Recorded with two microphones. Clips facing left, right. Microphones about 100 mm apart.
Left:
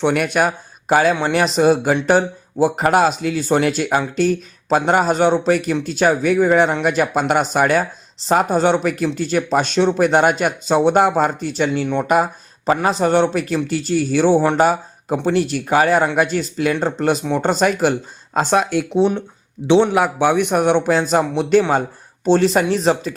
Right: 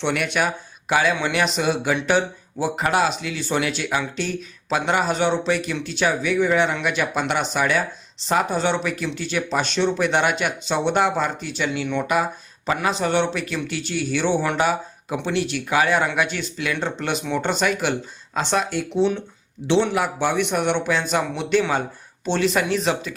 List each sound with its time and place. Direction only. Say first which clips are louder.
0.0 s a man's voice: left 6 dB; 45° left (ahead or behind)